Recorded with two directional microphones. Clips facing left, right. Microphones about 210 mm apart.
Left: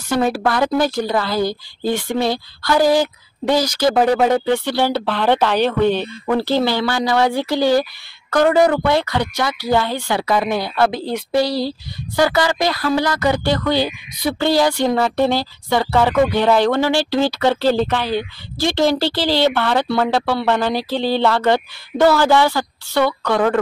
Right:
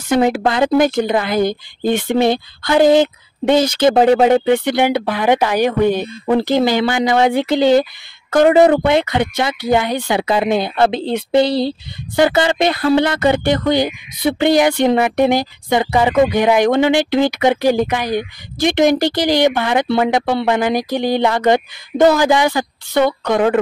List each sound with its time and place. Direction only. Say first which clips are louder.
0.1 s a woman's voice: right 3 dB; 20° right (ahead or behind)